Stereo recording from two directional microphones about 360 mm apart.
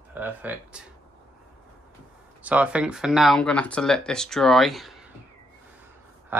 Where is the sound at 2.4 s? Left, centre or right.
Centre.